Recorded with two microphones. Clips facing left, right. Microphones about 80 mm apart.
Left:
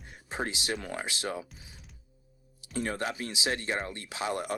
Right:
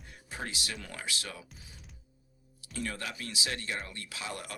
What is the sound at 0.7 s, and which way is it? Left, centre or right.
Speech, left.